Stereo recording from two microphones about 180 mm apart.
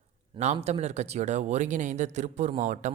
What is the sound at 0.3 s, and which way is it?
Speech, 35° right (ahead or behind).